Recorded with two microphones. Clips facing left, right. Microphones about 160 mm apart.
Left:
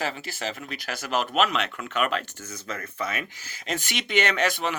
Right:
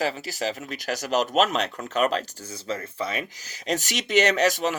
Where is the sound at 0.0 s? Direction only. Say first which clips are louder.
Right 4 dB; 40° right (ahead or behind).